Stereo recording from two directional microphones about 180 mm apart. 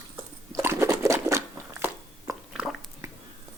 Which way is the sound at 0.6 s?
15° right (ahead or behind).